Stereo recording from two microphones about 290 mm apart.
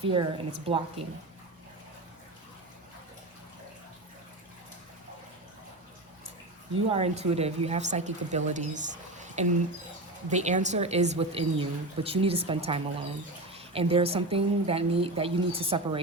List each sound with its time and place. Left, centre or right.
0.0 s a woman's voice: centre
6.7 s a woman's voice: centre